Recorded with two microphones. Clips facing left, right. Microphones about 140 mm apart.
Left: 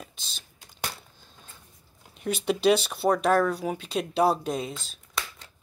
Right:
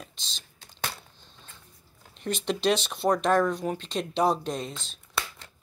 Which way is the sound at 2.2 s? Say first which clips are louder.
Left 3 dB; 5° left (ahead or behind).